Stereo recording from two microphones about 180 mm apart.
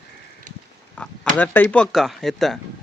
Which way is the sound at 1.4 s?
10° left (ahead or behind).